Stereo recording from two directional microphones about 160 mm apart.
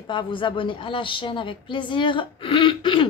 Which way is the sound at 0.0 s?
30° left (ahead or behind).